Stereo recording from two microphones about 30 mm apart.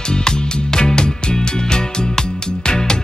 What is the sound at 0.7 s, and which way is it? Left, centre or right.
Music, left.